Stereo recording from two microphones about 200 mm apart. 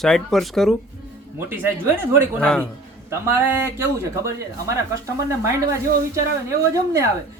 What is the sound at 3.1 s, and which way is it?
Speech, 10° right (ahead or behind).